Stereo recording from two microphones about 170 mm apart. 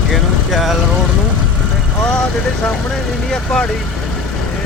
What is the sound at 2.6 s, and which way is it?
Speech, 5° left (ahead or behind).